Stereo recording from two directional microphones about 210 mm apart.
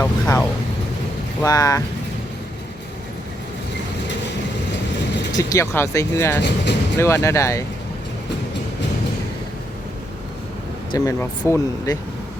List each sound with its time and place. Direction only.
0.0 s speech: 15° left (ahead or behind)
5.3 s speech: 15° left (ahead or behind)
10.9 s speech: 15° left (ahead or behind)